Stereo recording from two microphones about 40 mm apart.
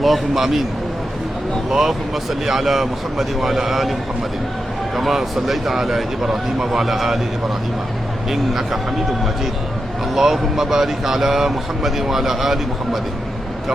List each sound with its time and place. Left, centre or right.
0.0 s speech: centre
1.7 s speech: centre
4.9 s speech: centre
8.3 s speech: centre
10.2 s speech: centre